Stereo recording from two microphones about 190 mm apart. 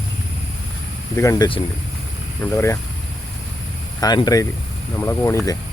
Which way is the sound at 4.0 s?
20° left (ahead or behind).